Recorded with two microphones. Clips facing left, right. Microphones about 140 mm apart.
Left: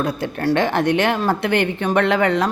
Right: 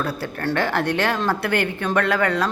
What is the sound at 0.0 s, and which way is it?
Speech, 20° left (ahead or behind).